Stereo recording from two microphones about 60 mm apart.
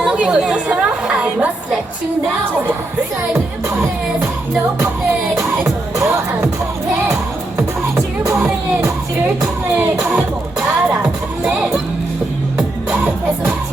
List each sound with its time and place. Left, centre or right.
0.0 s a woman's voice: centre
9.7 s music: right